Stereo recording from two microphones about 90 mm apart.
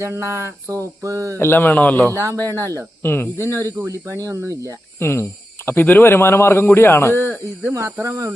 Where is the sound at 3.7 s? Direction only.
35° right (ahead or behind).